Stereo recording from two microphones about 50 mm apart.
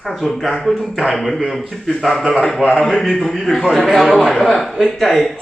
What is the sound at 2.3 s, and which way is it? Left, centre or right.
Speech, centre.